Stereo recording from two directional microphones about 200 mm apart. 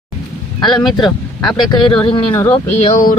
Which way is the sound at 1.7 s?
25° left (ahead or behind).